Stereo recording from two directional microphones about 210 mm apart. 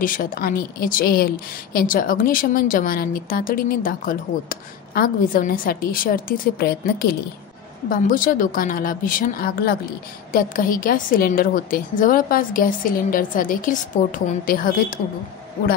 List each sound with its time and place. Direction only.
0.0 s a woman's voice: 40° left (ahead or behind)